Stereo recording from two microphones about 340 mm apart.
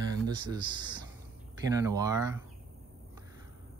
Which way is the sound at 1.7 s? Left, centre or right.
Centre.